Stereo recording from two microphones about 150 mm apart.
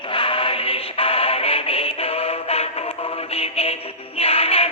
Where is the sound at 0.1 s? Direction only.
35° left (ahead or behind).